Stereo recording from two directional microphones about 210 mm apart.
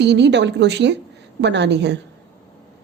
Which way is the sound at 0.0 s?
55° right (ahead or behind).